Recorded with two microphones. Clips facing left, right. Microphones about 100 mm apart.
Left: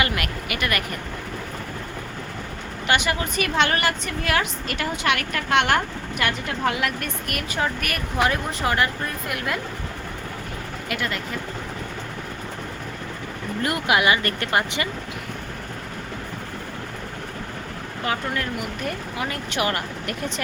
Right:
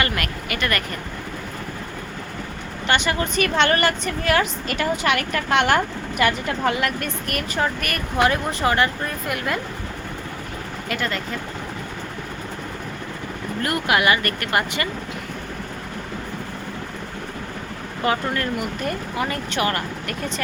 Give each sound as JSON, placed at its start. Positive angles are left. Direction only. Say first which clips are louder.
{"t": 0.0, "sound": "speech", "louder": "even", "side_deg": 10}
{"t": 2.8, "sound": "a woman's voice", "louder": "right 1 dB", "side_deg": 5}
{"t": 10.8, "sound": "a woman's voice", "louder": "right 2 dB", "side_deg": 5}
{"t": 13.6, "sound": "speech", "louder": "even", "side_deg": 20}
{"t": 18.0, "sound": "a woman's voice", "louder": "right 4 dB", "side_deg": 0}
{"t": 19.5, "sound": "speech", "louder": "right 2 dB", "side_deg": 15}